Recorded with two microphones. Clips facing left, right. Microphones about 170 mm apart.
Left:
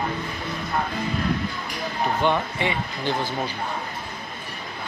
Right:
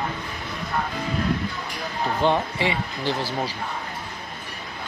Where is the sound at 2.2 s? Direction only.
30° right (ahead or behind).